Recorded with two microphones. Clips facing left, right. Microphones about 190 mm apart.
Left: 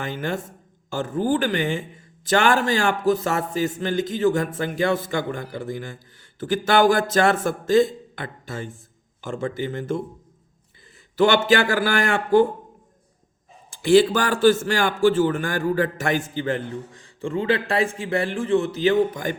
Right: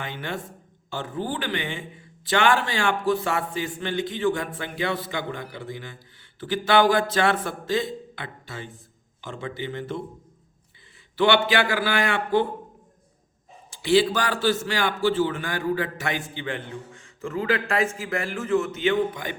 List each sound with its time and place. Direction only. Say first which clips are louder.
0.0 s a man's voice: left 5 dB; 45° left (ahead or behind)
11.2 s a man's voice: left 3 dB; 45° left (ahead or behind)
13.7 s a man's voice: left 4 dB; 50° left (ahead or behind)